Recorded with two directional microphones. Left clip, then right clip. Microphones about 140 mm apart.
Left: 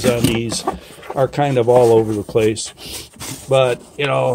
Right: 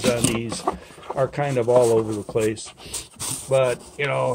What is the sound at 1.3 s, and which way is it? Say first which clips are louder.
Speech: left 6 dB; 55° left (ahead or behind).